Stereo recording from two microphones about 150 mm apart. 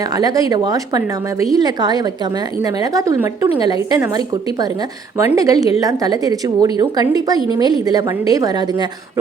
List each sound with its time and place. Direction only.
0.2 s a woman's voice: 25° right (ahead or behind)
5.1 s a woman's voice: 20° right (ahead or behind)